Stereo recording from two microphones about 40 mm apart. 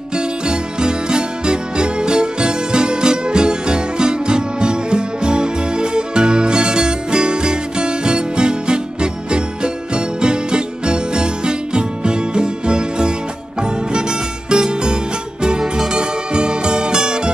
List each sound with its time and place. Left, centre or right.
0.1 s music: right
14.5 s music: right